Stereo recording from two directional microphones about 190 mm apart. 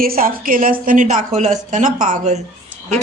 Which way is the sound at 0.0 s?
50° right (ahead or behind).